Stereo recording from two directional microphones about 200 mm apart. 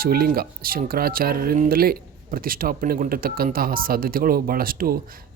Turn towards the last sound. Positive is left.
turn(degrees=-50)  # may be behind; listen again after turning